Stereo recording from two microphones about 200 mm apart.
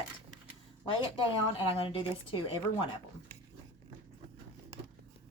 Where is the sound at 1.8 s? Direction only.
25° left (ahead or behind).